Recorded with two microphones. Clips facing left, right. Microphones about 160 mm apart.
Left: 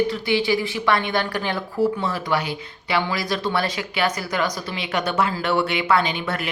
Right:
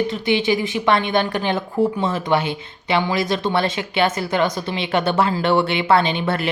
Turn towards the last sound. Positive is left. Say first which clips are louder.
# right 4 dB
turn(degrees=-30)  # may be behind; listen again after turning